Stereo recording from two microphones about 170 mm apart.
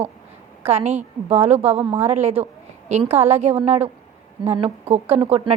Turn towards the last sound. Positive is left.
turn(degrees=-35)  # may be behind; listen again after turning